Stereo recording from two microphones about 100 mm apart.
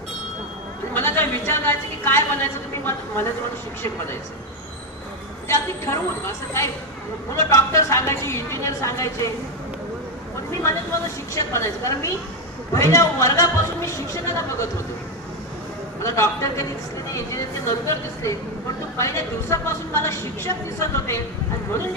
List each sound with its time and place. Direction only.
0.9 s a woman's voice: 20° left (ahead or behind)
5.5 s speech: 25° left (ahead or behind)
10.5 s a man's voice: 30° left (ahead or behind)
16.0 s a man's voice: 30° left (ahead or behind)